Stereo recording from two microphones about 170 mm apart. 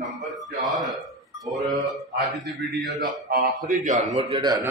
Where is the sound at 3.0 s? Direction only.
60° right (ahead or behind).